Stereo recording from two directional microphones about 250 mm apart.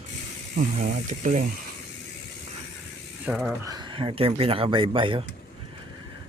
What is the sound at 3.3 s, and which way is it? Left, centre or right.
Mechanisms, centre.